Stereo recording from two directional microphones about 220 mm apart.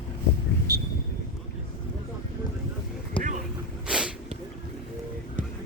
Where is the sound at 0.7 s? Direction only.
45° right (ahead or behind).